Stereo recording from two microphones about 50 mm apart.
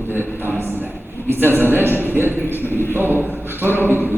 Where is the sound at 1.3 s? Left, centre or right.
Right.